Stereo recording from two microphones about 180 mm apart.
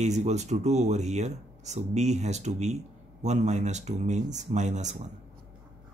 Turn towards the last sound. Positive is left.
turn(degrees=-40)  # may be behind; listen again after turning